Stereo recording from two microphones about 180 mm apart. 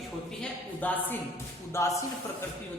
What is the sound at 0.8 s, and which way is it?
A man's voice, 10° left (ahead or behind).